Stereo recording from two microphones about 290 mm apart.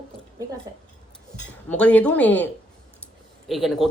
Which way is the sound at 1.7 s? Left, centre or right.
Centre.